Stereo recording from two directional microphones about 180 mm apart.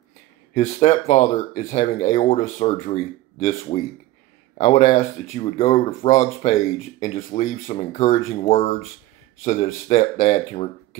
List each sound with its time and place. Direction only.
0.6 s speech: 35° left (ahead or behind)
4.6 s speech: 40° left (ahead or behind)